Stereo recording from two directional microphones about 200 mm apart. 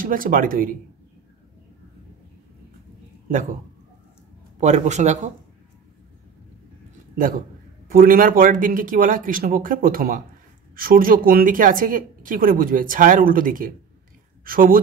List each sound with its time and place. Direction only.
0.0 s speech: 45° right (ahead or behind)
4.6 s a man's voice: 35° right (ahead or behind)
7.2 s speech: 45° right (ahead or behind)